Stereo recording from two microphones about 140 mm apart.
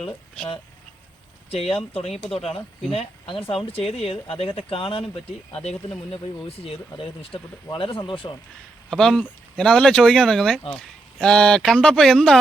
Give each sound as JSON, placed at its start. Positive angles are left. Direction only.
{"t": 1.5, "sound": "speech", "side_deg": 45}
{"t": 6.7, "sound": "speech", "side_deg": 40}
{"t": 8.9, "sound": "speech", "side_deg": 5}